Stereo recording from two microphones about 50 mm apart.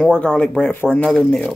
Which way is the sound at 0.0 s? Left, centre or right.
Centre.